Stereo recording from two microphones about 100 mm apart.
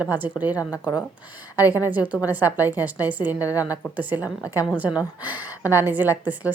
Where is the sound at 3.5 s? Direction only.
35° left (ahead or behind).